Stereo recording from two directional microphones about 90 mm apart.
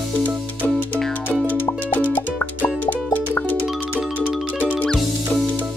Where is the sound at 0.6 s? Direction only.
20° left (ahead or behind).